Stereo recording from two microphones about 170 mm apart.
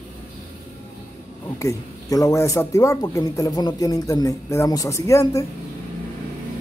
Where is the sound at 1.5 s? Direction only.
20° left (ahead or behind).